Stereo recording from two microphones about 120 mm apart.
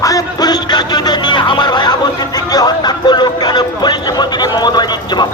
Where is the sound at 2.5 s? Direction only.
35° left (ahead or behind).